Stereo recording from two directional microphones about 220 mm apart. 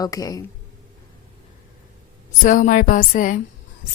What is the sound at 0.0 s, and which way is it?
Speech, 15° left (ahead or behind).